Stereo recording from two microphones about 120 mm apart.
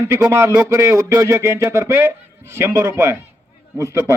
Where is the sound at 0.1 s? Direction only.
25° right (ahead or behind).